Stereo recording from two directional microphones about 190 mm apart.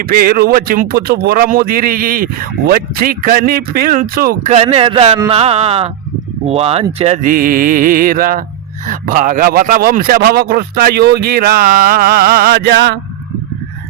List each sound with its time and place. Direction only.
0.0 s a man's voice: 50° right (ahead or behind)
4.5 s a man's voice: 30° right (ahead or behind); by 13.0 s 60° right (ahead or behind)